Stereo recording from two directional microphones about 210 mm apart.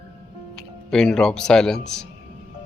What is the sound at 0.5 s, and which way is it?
Speech, 5° left (ahead or behind).